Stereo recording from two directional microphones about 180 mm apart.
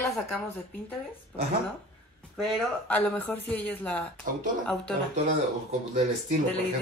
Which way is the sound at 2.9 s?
10° left (ahead or behind).